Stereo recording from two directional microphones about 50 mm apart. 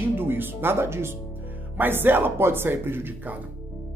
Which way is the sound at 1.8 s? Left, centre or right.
Right.